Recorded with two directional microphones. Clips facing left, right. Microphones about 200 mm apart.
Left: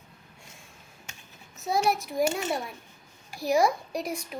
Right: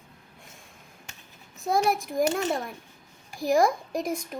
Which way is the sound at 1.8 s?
50° right (ahead or behind).